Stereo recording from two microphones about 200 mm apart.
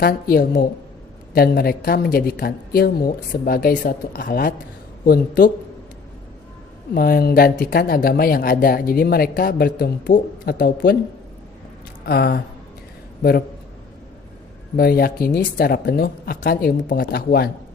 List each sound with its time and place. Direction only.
0.0 s speech: 50° left (ahead or behind)
6.9 s speech: 50° left (ahead or behind)
12.0 s speech: 50° left (ahead or behind)
14.8 s speech: 50° left (ahead or behind)